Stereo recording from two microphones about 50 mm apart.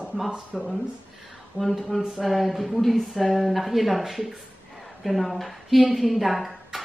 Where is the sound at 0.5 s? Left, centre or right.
Centre.